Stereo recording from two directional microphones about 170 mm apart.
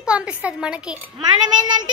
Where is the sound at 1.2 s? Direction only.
25° right (ahead or behind).